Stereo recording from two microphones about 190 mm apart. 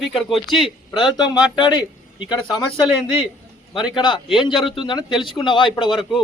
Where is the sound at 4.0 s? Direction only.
25° left (ahead or behind).